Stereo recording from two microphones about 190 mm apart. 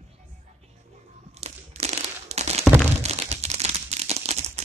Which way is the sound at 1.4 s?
35° right (ahead or behind).